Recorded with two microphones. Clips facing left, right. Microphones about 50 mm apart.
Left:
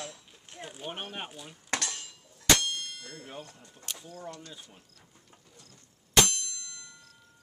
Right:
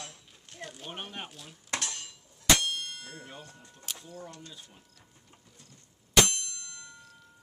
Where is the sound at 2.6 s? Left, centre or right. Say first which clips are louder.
Right 1 dB; right.